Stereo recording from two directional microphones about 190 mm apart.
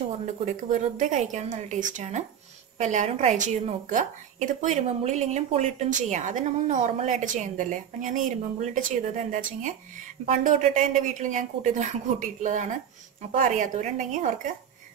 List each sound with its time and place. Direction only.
0.7 s a woman's voice: 40° right (ahead or behind)